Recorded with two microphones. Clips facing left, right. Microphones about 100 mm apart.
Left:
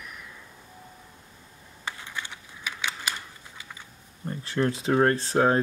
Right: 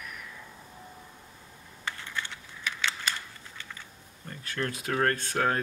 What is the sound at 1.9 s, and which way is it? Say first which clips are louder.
Typing: even; 15° left (ahead or behind).